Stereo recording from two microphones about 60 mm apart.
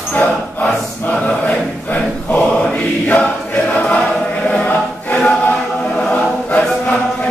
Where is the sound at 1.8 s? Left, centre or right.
Left.